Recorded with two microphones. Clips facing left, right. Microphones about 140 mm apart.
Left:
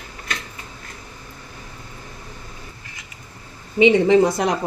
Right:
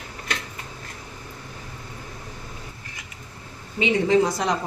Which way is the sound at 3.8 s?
60° left (ahead or behind).